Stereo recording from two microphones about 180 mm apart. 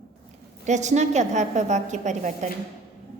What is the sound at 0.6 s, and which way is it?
A woman's voice, 40° right (ahead or behind).